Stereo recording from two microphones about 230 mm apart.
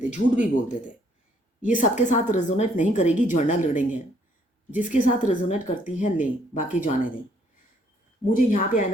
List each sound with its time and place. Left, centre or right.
0.0 s a woman's voice: left
8.3 s a woman's voice: left